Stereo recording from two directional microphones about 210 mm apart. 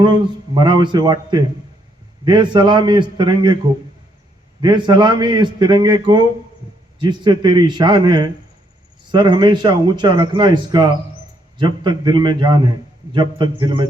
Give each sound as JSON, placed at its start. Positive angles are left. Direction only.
{"t": 0.0, "sound": "speech", "side_deg": -20}
{"t": 4.6, "sound": "speech", "side_deg": -20}